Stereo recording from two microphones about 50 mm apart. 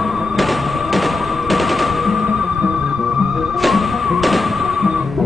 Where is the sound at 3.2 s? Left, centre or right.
Centre.